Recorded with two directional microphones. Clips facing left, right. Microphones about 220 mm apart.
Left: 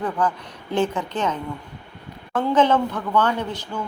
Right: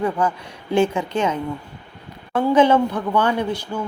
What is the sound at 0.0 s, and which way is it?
A woman's voice, 10° right (ahead or behind).